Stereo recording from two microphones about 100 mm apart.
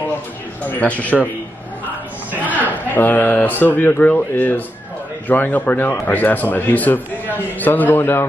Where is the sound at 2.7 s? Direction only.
20° left (ahead or behind).